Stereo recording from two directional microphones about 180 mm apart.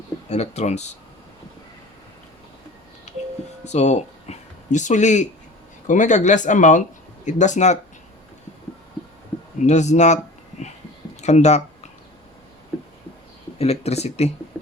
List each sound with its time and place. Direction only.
0.3 s speech: 40° left (ahead or behind)
3.6 s speech: 40° left (ahead or behind)
9.6 s speech: 40° left (ahead or behind)
11.2 s speech: 40° left (ahead or behind)
13.6 s speech: 35° left (ahead or behind)
14.5 s music: centre (ahead or behind)